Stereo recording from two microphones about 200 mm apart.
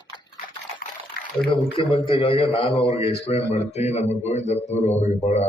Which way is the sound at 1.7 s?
25° left (ahead or behind).